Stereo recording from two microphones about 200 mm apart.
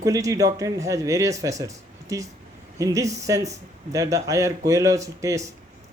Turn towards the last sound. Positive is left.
turn(degrees=-15)  # may be behind; listen again after turning